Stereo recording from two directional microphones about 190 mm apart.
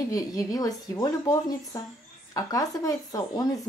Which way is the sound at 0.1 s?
20° left (ahead or behind).